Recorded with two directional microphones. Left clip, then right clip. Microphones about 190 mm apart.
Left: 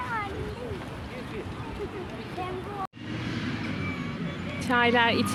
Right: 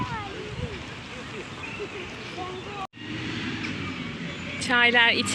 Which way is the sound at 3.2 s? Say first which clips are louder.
Right 2 dB; 60° left (ahead or behind).